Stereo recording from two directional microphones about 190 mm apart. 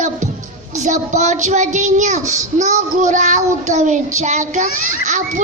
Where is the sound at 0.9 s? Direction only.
40° right (ahead or behind).